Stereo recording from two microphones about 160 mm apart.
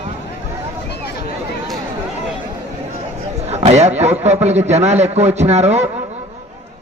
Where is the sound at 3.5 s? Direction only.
45° right (ahead or behind).